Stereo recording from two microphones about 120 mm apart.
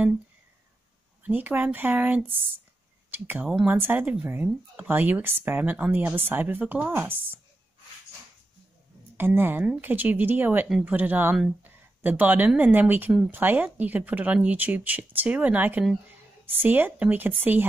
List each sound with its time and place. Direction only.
1.2 s speech: 15° right (ahead or behind)
9.1 s speech: 15° right (ahead or behind)